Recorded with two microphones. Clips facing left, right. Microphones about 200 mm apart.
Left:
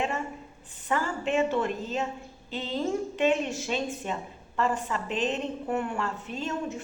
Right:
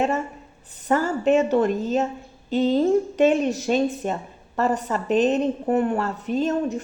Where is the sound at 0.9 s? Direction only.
40° right (ahead or behind).